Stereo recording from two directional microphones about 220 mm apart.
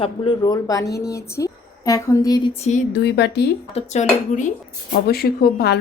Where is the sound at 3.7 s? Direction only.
30° left (ahead or behind).